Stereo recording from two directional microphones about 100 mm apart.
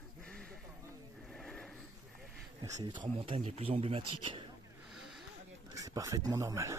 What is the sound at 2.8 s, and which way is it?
Speech, 50° right (ahead or behind).